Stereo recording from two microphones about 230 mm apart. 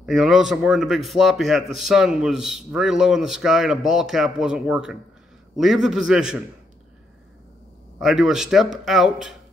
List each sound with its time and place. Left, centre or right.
0.0 s a man's voice: centre
8.0 s a man's voice: centre